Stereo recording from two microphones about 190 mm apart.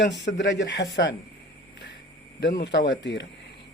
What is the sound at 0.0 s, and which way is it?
A man's voice, 65° left (ahead or behind).